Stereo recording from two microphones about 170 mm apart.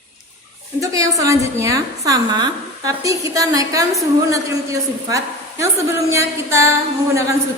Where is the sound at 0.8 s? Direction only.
20° right (ahead or behind).